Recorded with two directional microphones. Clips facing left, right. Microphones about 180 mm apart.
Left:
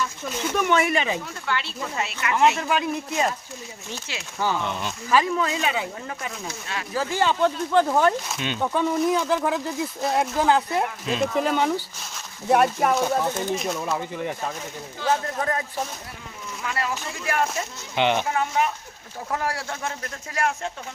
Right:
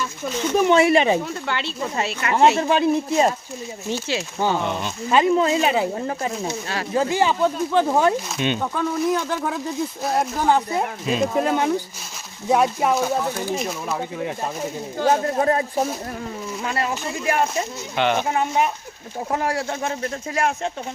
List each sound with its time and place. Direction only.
0.5 s speech: 30° right (ahead or behind)
7.1 s speech: 10° right (ahead or behind)
7.9 s speech: 20° right (ahead or behind)
8.7 s speech: centre (ahead or behind)
14.9 s speech: 45° right (ahead or behind)
15.2 s speech: 30° right (ahead or behind)
16.6 s speech: 30° right (ahead or behind)
17.9 s speech: 15° left (ahead or behind)
18.2 s speech: 20° right (ahead or behind)